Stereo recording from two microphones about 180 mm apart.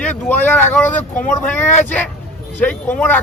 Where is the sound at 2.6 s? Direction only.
10° left (ahead or behind).